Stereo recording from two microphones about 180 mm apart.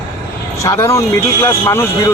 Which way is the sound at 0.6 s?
15° left (ahead or behind).